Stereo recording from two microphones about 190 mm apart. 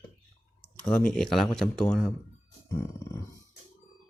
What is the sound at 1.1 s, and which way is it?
Speech, centre (ahead or behind).